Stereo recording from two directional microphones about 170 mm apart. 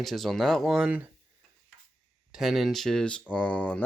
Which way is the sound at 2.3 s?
Centre (ahead or behind).